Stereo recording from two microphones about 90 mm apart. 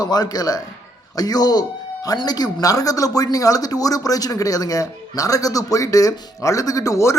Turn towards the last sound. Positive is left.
turn(degrees=35)  # may be behind; listen again after turning